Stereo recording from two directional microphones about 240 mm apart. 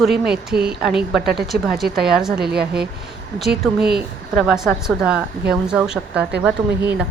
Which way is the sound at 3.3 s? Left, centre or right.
Centre.